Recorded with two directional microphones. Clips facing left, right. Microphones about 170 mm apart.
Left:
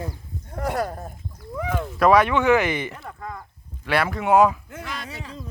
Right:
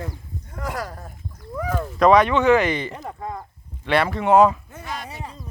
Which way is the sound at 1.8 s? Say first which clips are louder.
Right 2 dB; 5° left (ahead or behind).